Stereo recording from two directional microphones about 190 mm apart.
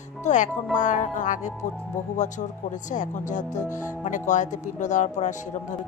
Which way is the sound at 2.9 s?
40° left (ahead or behind).